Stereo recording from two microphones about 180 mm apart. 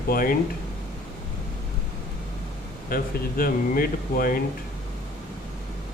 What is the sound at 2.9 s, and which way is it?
A man's voice, 55° left (ahead or behind).